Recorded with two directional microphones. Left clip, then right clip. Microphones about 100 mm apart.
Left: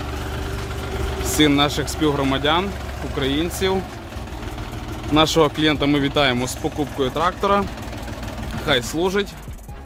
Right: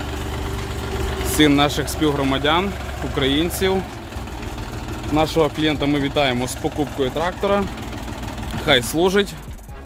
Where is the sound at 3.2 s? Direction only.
15° right (ahead or behind).